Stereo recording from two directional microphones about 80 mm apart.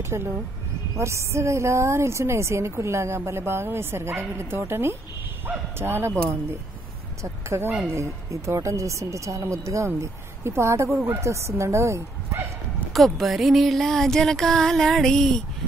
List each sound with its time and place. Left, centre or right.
0.1 s speech: right
7.4 s speech: right
12.9 s music: centre